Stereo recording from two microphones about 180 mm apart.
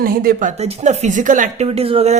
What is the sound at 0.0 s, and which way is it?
Speech, 55° right (ahead or behind).